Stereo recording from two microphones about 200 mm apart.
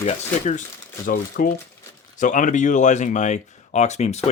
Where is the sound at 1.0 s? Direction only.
45° left (ahead or behind).